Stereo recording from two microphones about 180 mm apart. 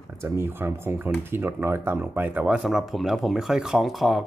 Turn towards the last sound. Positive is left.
turn(degrees=0)  # may be behind; listen again after turning